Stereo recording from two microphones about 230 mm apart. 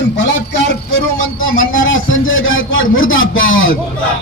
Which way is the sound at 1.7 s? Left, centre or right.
Left.